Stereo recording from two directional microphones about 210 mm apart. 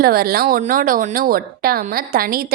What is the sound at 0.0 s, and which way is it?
A woman's voice, 45° right (ahead or behind).